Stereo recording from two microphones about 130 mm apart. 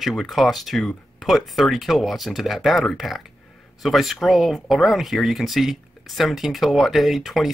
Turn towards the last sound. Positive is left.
turn(degrees=0)  # may be behind; listen again after turning